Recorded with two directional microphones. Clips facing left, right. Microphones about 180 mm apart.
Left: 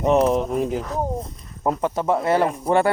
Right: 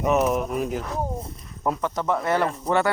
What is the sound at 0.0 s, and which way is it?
Speech, 30° left (ahead or behind).